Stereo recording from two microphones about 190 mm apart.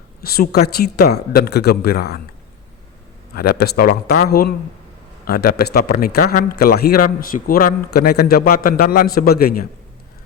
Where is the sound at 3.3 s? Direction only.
55° left (ahead or behind).